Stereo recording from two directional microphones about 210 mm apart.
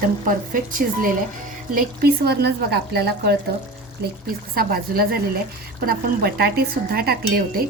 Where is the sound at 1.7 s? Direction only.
50° right (ahead or behind).